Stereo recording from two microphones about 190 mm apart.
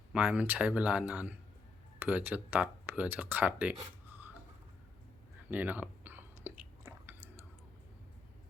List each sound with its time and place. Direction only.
0.1 s speech: 5° right (ahead or behind)
5.5 s chewing: 10° right (ahead or behind)